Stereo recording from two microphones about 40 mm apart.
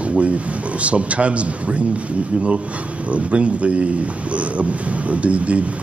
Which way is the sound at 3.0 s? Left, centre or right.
Right.